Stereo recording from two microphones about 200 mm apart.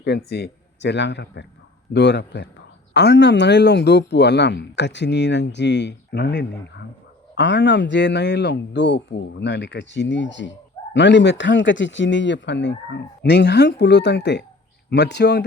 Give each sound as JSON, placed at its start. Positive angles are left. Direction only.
{"t": 0.0, "sound": "a man's voice", "side_deg": 55}